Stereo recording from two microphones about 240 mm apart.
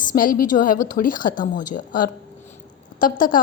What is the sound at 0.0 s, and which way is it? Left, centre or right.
A woman's voice, left.